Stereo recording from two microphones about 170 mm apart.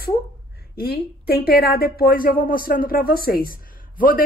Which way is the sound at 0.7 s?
65° left (ahead or behind).